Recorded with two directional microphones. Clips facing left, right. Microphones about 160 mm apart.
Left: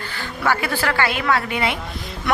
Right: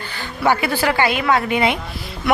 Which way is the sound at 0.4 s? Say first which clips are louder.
Right 4 dB; 15° right (ahead or behind).